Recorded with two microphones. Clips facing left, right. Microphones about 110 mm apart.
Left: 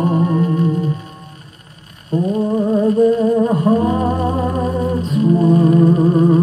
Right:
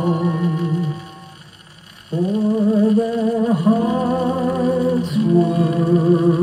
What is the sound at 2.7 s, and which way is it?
Music, 30° left (ahead or behind).